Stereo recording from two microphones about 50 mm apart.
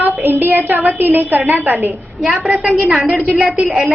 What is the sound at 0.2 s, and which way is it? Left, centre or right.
A woman's voice, right.